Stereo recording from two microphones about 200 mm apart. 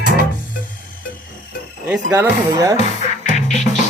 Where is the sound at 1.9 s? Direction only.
10° right (ahead or behind).